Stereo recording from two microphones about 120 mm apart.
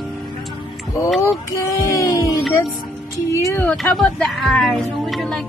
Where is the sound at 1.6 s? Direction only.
25° left (ahead or behind).